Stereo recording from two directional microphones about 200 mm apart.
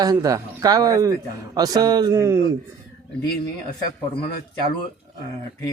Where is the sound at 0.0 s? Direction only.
20° right (ahead or behind).